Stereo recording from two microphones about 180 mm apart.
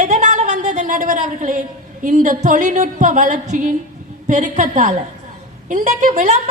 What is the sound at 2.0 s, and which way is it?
A woman's voice, 45° right (ahead or behind).